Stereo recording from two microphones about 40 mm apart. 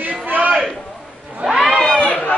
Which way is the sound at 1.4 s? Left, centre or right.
Centre.